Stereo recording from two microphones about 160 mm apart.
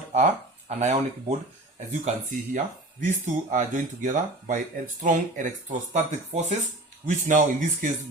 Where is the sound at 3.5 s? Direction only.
55° right (ahead or behind).